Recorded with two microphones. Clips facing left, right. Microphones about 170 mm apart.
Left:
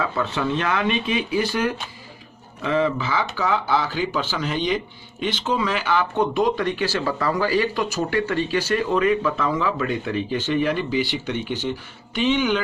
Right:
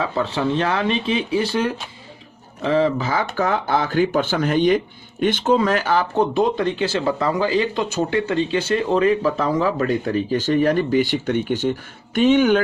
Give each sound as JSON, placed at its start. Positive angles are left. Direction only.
{"t": 0.0, "sound": "speech", "side_deg": -30}